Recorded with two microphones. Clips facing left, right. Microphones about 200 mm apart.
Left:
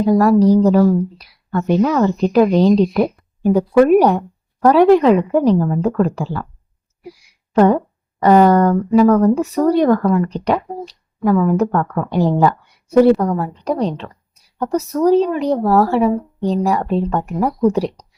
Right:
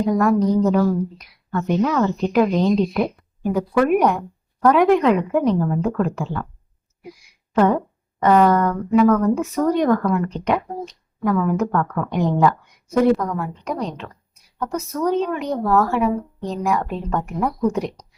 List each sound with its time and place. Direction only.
0.1 s speech: 35° left (ahead or behind)
7.5 s speech: 35° left (ahead or behind)